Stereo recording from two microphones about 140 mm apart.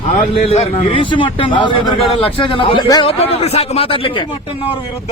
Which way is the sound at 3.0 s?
45° left (ahead or behind).